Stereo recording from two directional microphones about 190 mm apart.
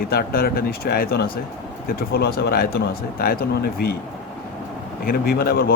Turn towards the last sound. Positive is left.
turn(degrees=55)  # may be behind; listen again after turning